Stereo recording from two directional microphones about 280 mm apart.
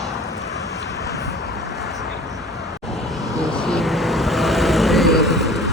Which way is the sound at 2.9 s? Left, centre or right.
Centre.